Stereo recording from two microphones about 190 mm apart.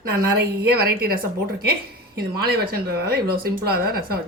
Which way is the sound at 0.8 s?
55° right (ahead or behind).